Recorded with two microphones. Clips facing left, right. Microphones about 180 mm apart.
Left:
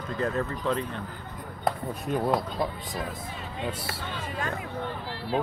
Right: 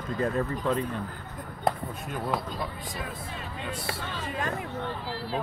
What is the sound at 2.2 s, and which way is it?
Speech, 25° left (ahead or behind).